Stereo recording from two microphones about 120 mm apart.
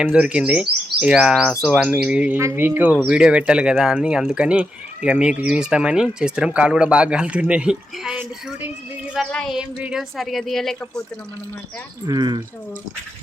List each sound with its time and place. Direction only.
0.0 s speech: 10° right (ahead or behind)
2.4 s speech: 20° right (ahead or behind)
9.1 s speech: centre (ahead or behind)
12.0 s speech: 35° right (ahead or behind)